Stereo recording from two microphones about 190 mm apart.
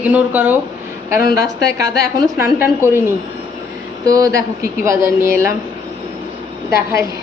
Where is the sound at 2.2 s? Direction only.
15° right (ahead or behind).